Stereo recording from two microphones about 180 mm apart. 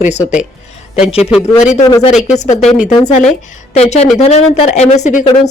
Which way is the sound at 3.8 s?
35° left (ahead or behind).